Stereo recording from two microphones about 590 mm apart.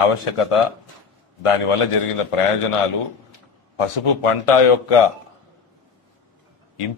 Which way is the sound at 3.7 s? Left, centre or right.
Left.